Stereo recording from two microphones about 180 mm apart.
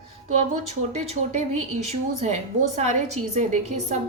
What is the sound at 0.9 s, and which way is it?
Speech, 40° right (ahead or behind).